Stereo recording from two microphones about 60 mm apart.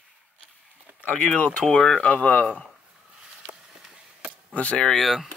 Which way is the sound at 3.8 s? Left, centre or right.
Centre.